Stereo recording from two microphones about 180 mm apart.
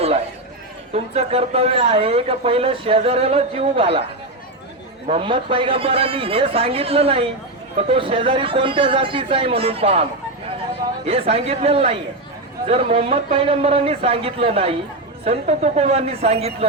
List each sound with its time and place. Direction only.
0.9 s a man's voice: 35° right (ahead or behind)
5.0 s a man's voice: 30° right (ahead or behind)